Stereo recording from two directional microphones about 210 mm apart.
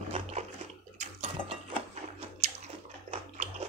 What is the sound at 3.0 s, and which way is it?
Bathtub, 30° right (ahead or behind).